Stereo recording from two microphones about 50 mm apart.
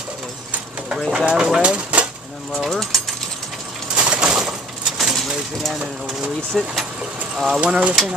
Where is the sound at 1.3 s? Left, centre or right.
Centre.